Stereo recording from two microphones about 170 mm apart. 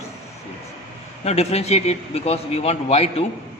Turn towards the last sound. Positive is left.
turn(degrees=35)  # may be behind; listen again after turning